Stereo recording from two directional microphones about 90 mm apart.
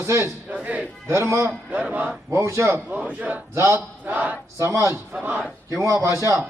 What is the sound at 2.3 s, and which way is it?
A man's voice, 30° right (ahead or behind).